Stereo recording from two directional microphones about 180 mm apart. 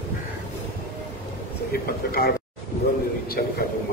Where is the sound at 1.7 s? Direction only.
60° left (ahead or behind).